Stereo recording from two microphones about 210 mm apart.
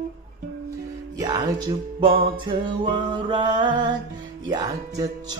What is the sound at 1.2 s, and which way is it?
Music, 20° right (ahead or behind).